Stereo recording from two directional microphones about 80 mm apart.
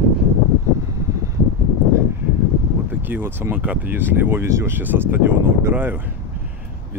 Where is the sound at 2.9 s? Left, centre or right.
Right.